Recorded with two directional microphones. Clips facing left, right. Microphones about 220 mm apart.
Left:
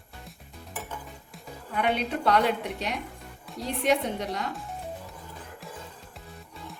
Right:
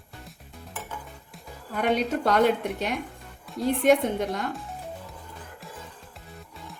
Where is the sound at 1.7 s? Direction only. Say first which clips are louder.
Right 3 dB; 40° right (ahead or behind).